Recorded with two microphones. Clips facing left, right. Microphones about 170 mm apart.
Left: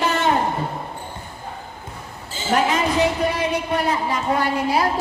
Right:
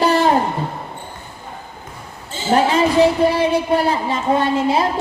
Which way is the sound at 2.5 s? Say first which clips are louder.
Right 4 dB; 30° right (ahead or behind).